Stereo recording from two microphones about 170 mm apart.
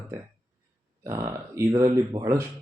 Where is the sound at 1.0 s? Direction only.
15° right (ahead or behind).